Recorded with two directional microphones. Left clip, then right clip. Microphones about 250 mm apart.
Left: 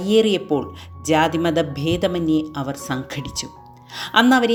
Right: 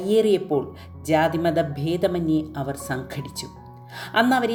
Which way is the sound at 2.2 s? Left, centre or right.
Centre.